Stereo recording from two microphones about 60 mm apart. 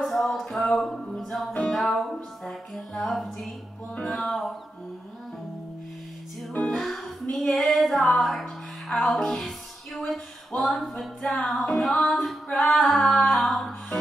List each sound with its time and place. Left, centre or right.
0.0 s music: centre
6.5 s music: left
6.8 s music: centre
9.9 s a sound: centre
10.6 s music: centre